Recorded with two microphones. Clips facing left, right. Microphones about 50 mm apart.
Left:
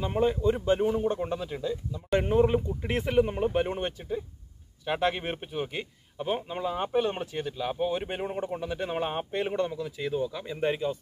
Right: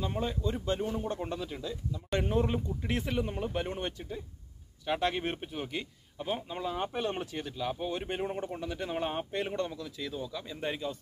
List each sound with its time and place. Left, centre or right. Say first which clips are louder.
0.0 s speech: left 8 dB; left
3.6 s speech: left 4 dB; centre